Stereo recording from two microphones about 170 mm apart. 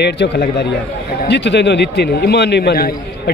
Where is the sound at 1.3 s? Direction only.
90° left.